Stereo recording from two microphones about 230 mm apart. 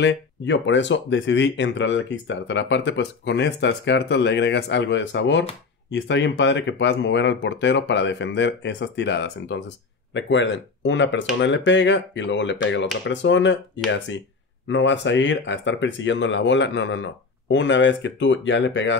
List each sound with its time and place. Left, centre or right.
0.0 s speech: left